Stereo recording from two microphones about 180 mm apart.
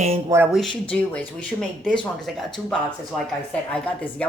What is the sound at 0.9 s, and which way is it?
Speech, 10° left (ahead or behind).